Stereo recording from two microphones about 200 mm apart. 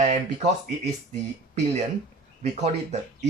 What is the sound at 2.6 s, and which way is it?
Speech, 35° right (ahead or behind).